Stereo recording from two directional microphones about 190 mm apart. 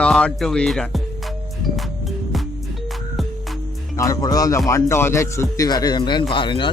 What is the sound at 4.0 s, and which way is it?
Speech, 20° left (ahead or behind).